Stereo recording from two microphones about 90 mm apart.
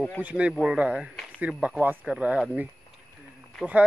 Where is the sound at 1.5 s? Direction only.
5° left (ahead or behind).